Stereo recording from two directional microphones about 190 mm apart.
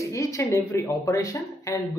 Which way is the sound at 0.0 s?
15° left (ahead or behind).